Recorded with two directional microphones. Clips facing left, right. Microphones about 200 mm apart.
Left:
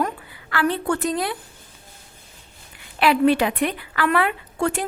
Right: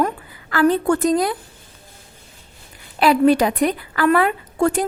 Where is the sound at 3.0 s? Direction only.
40° right (ahead or behind).